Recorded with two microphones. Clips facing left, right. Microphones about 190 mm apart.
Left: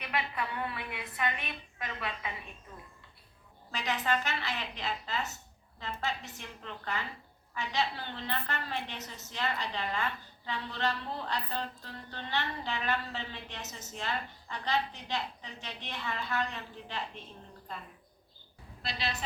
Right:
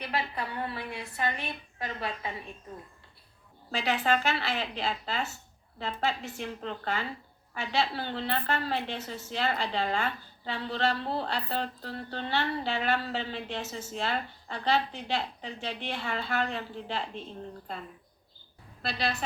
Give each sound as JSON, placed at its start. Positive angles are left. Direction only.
{"t": 0.0, "sound": "a woman's voice", "side_deg": -35}
{"t": 3.7, "sound": "a woman's voice", "side_deg": -30}
{"t": 18.8, "sound": "a woman's voice", "side_deg": -55}